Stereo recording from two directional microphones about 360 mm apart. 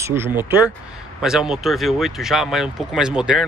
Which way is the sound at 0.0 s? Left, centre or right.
Centre.